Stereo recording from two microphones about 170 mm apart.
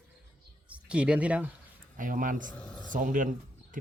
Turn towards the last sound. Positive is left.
turn(degrees=-50)  # may be behind; listen again after turning